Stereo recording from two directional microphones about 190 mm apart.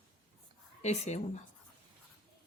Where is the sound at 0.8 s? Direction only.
35° left (ahead or behind).